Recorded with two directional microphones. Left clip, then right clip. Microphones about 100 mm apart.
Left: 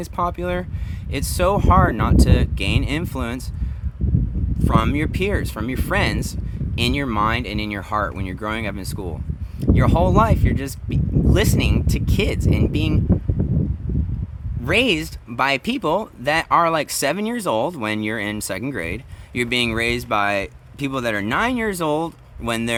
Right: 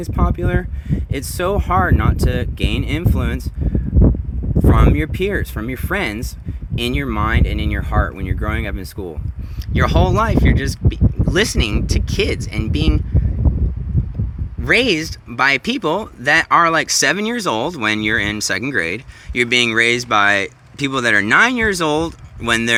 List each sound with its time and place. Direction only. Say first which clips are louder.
0.0 s speech: even; 20° left (ahead or behind)
4.6 s speech: right 3 dB; 20° left (ahead or behind)
14.6 s speech: right 4 dB; 30° left (ahead or behind)